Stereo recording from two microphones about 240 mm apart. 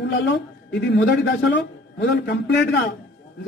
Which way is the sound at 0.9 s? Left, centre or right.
Left.